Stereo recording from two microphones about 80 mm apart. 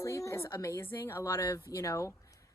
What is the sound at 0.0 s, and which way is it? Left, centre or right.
A woman's voice, left.